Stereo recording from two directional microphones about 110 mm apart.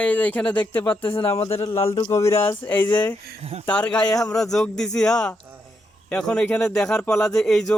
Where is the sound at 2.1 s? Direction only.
25° left (ahead or behind).